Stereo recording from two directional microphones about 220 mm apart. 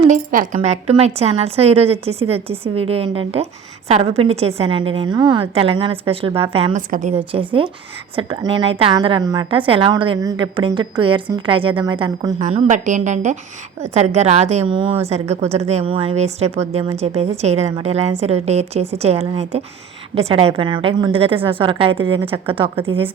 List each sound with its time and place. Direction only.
0.1 s a woman's voice: 35° right (ahead or behind); by 12.3 s 20° right (ahead or behind)
12.4 s a woman's voice: 35° right (ahead or behind)